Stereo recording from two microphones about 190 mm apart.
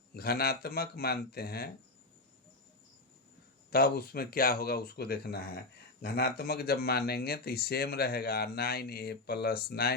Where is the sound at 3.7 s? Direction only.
55° left (ahead or behind).